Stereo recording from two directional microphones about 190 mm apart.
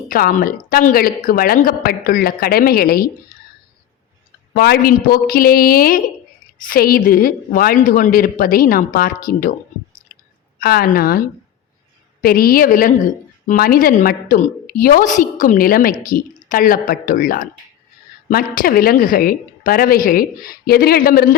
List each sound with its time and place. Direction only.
0.1 s a woman's voice: 50° left (ahead or behind)
4.5 s a woman's voice: 55° left (ahead or behind)
12.2 s a woman's voice: 50° left (ahead or behind)